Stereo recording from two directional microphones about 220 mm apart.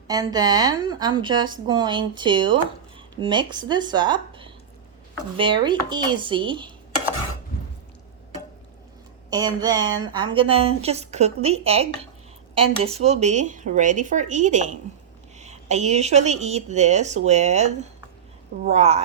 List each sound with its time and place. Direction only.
0.1 s a woman's voice: 15° right (ahead or behind)
5.6 s a woman's voice: 20° right (ahead or behind)
9.3 s a woman's voice: 20° right (ahead or behind)
18.7 s a woman's voice: 30° right (ahead or behind)